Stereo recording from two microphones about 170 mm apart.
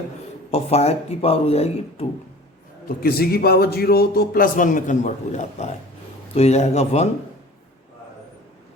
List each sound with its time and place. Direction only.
0.5 s speech: 40° left (ahead or behind)
3.0 s a man's voice: 65° left (ahead or behind); by 7.1 s 40° left (ahead or behind)